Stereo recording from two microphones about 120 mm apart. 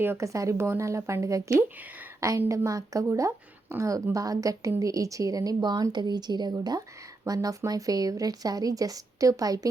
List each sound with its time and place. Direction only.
0.0 s speech: 20° right (ahead or behind)